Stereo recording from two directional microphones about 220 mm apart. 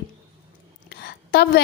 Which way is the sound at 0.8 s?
45° left (ahead or behind).